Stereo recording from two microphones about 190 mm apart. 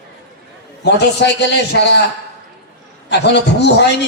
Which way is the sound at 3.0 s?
65° left (ahead or behind).